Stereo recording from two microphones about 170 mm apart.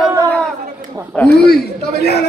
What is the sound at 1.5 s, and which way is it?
Speech, 70° left (ahead or behind).